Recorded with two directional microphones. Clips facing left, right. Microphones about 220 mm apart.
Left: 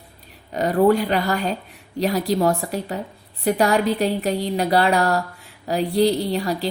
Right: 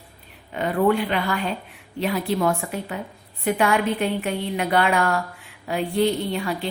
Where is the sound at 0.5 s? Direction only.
40° left (ahead or behind).